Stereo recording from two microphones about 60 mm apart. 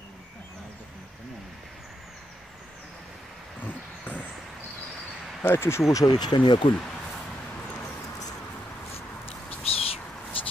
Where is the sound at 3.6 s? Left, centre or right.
Left.